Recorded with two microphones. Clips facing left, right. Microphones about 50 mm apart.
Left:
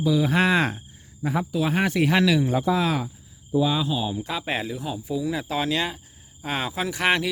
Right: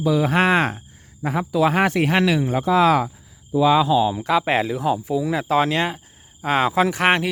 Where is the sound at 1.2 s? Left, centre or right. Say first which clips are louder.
Right 2 dB; right.